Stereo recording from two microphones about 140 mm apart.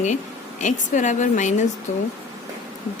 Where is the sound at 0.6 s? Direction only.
60° left (ahead or behind).